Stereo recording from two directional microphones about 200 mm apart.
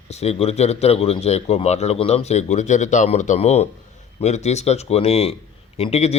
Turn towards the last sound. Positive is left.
turn(degrees=30)  # may be behind; listen again after turning